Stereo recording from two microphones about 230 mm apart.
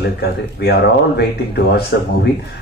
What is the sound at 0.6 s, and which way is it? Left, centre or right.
Speech, left.